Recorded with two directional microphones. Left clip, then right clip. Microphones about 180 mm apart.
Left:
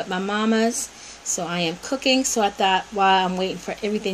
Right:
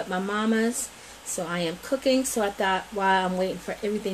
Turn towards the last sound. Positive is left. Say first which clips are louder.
# left 2 dB
turn(degrees=45)  # may be behind; listen again after turning